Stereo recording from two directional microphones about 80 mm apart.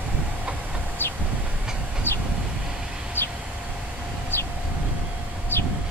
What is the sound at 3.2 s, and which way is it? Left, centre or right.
Vehicle, left.